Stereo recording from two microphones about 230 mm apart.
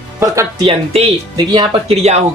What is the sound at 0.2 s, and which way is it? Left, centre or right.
Music, centre.